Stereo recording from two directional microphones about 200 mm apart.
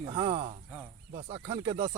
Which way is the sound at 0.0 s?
25° right (ahead or behind).